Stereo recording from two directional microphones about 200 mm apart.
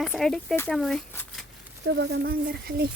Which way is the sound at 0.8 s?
Centre (ahead or behind).